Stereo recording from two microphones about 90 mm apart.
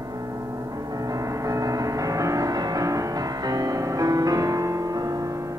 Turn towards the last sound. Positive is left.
turn(degrees=-40)  # may be behind; listen again after turning